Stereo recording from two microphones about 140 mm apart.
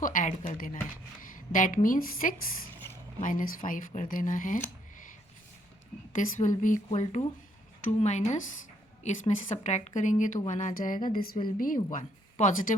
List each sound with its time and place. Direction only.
0.0 s a woman's voice: 70° left (ahead or behind)
3.2 s a woman's voice: 70° left (ahead or behind)
6.1 s a woman's voice: 65° left (ahead or behind)